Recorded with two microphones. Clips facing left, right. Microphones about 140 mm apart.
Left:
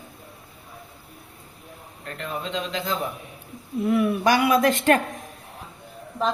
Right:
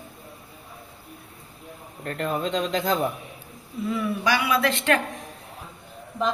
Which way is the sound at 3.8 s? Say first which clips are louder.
Left 5 dB; 60° left (ahead or behind).